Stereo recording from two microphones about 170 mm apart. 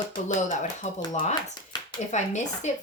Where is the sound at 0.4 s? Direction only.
45° left (ahead or behind).